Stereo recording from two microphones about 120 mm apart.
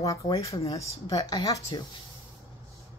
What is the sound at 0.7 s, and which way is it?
Speech, 25° left (ahead or behind).